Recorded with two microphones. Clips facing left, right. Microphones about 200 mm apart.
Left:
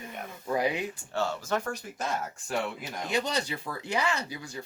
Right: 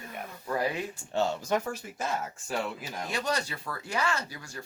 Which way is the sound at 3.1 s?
20° left (ahead or behind).